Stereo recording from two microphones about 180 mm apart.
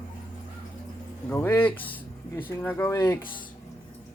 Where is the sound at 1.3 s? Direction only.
10° left (ahead or behind).